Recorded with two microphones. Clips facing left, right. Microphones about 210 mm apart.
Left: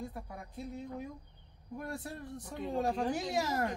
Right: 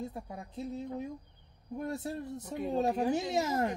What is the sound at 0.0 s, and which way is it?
Speech, 25° right (ahead or behind).